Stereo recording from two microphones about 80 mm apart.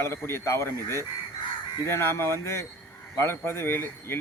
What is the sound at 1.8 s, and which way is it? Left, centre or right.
Speech, left.